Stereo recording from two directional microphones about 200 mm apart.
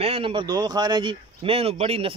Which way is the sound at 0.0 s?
30° right (ahead or behind).